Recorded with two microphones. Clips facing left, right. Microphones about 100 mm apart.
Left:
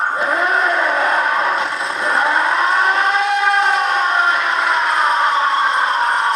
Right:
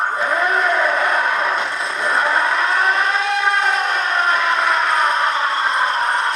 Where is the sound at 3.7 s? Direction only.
35° left (ahead or behind).